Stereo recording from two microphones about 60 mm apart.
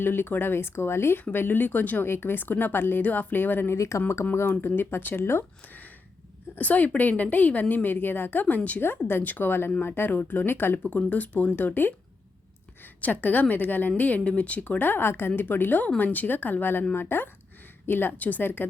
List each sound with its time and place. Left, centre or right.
0.0 s speech: left
2.0 s speech: left
3.8 s speech: left
4.6 s speech: left
5.6 s a sound: left
6.6 s a woman's voice: left